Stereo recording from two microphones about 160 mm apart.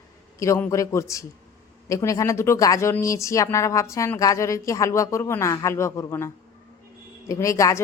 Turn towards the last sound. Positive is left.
turn(degrees=20)  # may be behind; listen again after turning